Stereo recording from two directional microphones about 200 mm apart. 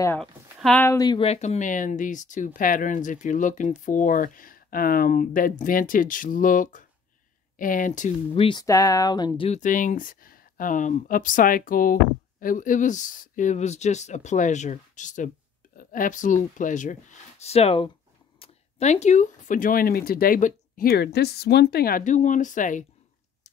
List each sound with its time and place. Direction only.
0.2 s speech: 5° left (ahead or behind); by 1.2 s 20° left (ahead or behind)
1.2 s speech: 35° left (ahead or behind)
8.5 s speech: 20° left (ahead or behind)
9.5 s speech: 40° left (ahead or behind)